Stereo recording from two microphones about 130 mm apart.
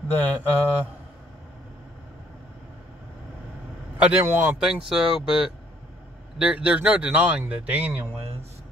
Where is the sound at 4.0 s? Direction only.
15° right (ahead or behind).